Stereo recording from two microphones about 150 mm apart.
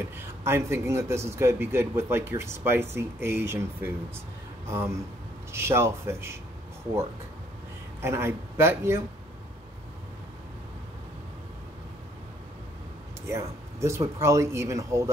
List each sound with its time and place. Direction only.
0.0 s a man's voice: 15° right (ahead or behind)
8.0 s a man's voice: 15° right (ahead or behind)
13.3 s a man's voice: 20° right (ahead or behind)